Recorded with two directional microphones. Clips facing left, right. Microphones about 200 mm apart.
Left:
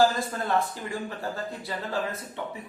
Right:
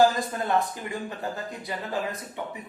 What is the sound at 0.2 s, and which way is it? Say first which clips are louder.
A man's voice: right 1 dB; 20° right (ahead or behind).